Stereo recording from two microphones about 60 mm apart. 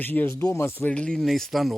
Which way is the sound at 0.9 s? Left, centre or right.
Centre.